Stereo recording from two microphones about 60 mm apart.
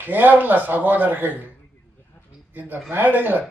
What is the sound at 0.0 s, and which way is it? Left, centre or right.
A man's voice, right.